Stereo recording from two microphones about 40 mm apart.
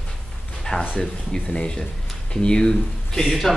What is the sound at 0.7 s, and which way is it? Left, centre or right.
Speech, left.